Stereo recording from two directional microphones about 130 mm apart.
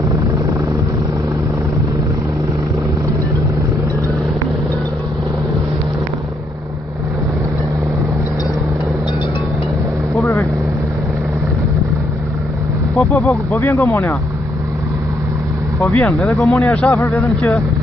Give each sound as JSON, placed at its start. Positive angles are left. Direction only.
{"t": 12.9, "sound": "speech", "side_deg": 25}
{"t": 15.8, "sound": "speech", "side_deg": 10}
{"t": 16.3, "sound": "speech", "side_deg": 0}
{"t": 16.8, "sound": "a man's voice", "side_deg": 15}